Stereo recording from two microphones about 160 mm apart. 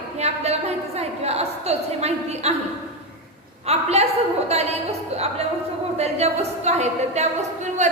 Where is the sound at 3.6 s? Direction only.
40° right (ahead or behind).